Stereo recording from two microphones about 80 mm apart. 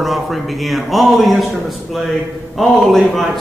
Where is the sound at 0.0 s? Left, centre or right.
Centre.